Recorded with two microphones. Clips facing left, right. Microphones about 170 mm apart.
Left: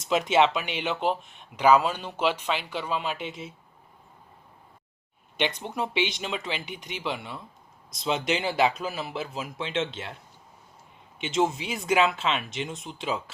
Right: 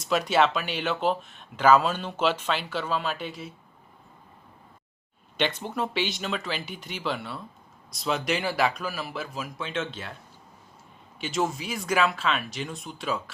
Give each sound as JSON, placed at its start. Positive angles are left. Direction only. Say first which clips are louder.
{"t": 0.1, "sound": "speech", "louder": "left 1 dB", "side_deg": 20}
{"t": 5.4, "sound": "speech", "louder": "right 1 dB", "side_deg": 15}
{"t": 11.2, "sound": "speech", "louder": "left 2 dB", "side_deg": 20}